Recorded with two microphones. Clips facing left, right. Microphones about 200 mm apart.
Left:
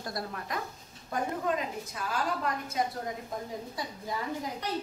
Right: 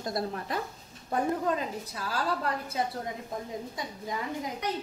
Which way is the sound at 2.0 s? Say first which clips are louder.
Right 1 dB; 30° right (ahead or behind).